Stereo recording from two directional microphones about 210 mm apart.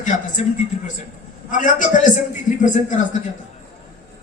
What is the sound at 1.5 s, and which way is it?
A man's voice, 35° left (ahead or behind).